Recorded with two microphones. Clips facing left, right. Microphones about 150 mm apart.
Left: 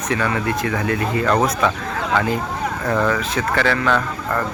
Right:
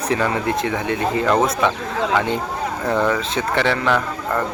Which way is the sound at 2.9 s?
5° right (ahead or behind).